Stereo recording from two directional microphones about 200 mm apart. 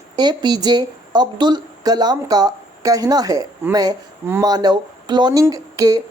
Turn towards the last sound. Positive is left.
turn(degrees=-15)  # may be behind; listen again after turning